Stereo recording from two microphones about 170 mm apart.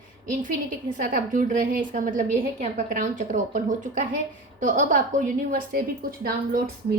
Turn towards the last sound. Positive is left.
turn(degrees=-60)  # may be behind; listen again after turning